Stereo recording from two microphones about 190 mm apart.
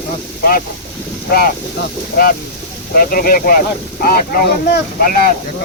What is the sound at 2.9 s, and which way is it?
Speech, 50° left (ahead or behind).